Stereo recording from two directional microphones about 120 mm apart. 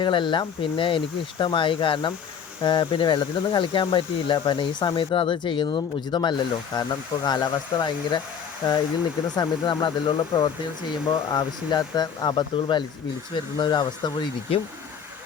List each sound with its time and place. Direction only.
0.0 s speech: 40° left (ahead or behind)